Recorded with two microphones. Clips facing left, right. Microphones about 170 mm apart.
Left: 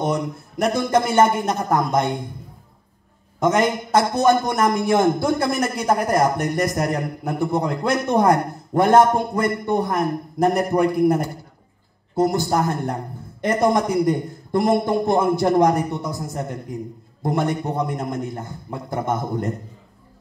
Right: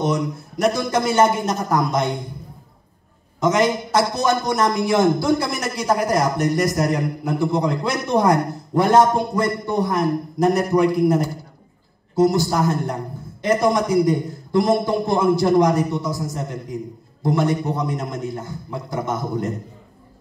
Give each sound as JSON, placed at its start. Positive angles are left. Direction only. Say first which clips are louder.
{"t": 0.0, "sound": "a man's voice", "louder": "right 1 dB", "side_deg": 55}
{"t": 3.3, "sound": "a man's voice", "louder": "right 1 dB", "side_deg": 55}